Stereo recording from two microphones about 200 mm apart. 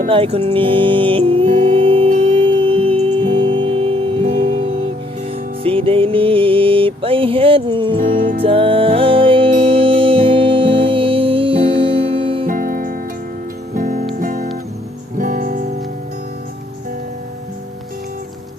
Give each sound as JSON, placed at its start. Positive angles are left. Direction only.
{"t": 0.1, "sound": "music", "side_deg": -30}
{"t": 5.6, "sound": "music", "side_deg": -25}
{"t": 12.5, "sound": "music", "side_deg": -45}